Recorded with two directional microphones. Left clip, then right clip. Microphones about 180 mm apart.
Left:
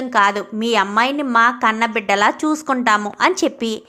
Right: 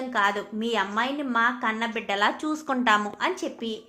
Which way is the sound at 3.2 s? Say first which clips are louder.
Left 11 dB; 40° left (ahead or behind).